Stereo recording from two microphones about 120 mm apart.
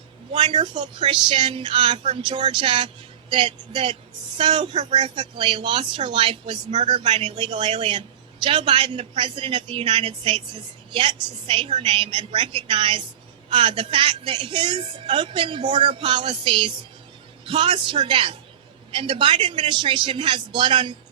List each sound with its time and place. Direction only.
0.3 s speech: 45° right (ahead or behind)